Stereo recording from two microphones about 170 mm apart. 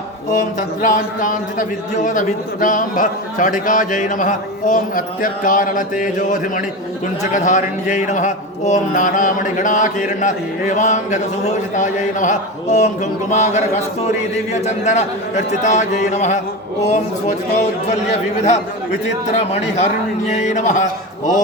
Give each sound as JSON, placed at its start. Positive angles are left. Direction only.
{"t": 0.3, "sound": "a man's voice", "side_deg": 50}